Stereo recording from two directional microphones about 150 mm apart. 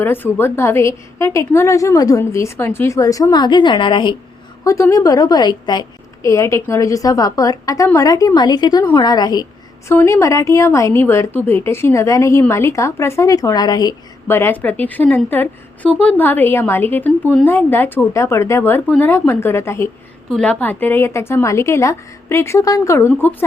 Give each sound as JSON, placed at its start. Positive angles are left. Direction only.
{"t": 0.0, "sound": "a woman's voice", "side_deg": 15}
{"t": 4.6, "sound": "a woman's voice", "side_deg": 20}
{"t": 9.9, "sound": "a woman's voice", "side_deg": 15}
{"t": 14.3, "sound": "a woman's voice", "side_deg": 15}